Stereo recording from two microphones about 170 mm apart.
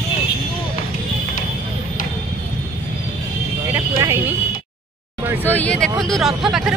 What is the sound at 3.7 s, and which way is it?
Speech, 15° right (ahead or behind).